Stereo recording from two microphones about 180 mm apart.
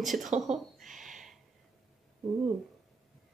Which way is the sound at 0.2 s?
40° right (ahead or behind).